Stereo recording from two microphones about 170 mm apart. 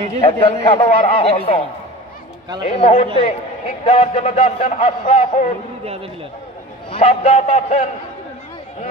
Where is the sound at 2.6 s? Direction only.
40° left (ahead or behind).